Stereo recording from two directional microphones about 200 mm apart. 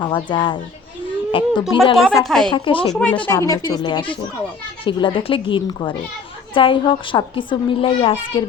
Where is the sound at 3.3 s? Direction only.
15° left (ahead or behind).